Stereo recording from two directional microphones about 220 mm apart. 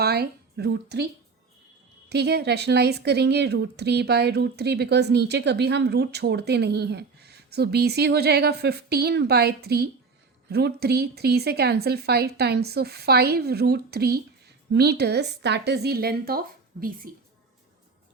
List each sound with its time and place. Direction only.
0.0 s speech: 45° right (ahead or behind)
2.0 s speech: 50° right (ahead or behind)